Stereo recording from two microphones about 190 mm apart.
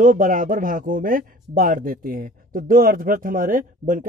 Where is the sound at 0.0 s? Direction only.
45° right (ahead or behind).